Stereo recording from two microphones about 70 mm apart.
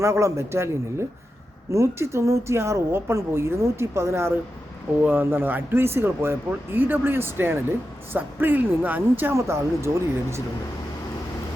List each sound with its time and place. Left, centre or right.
0.0 s speech: right
9.3 s speech: right